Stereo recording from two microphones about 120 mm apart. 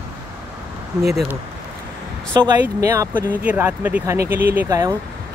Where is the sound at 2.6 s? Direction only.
25° right (ahead or behind).